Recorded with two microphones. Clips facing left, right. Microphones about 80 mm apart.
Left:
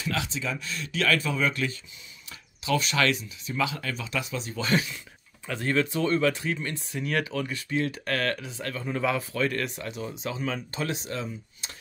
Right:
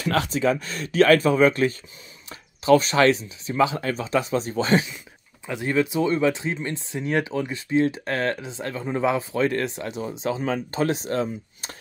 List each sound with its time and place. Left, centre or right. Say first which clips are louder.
0.0 s speech: right 9 dB; right
5.5 s speech: right 3 dB; centre; by 11.7 s right